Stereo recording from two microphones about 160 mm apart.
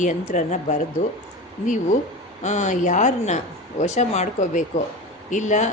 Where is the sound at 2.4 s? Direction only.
50° left (ahead or behind).